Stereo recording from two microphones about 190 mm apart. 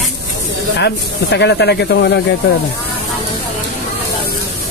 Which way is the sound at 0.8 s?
65° left (ahead or behind).